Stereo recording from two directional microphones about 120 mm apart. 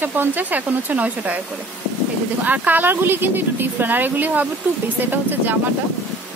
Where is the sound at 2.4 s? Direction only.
15° right (ahead or behind).